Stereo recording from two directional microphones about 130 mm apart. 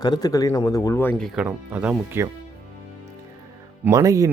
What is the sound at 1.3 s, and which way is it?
Speech, 10° right (ahead or behind).